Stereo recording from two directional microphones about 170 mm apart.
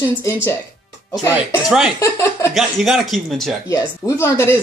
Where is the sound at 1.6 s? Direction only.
5° right (ahead or behind).